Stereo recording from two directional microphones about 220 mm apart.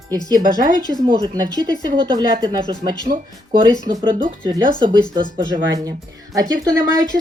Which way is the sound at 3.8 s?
20° right (ahead or behind).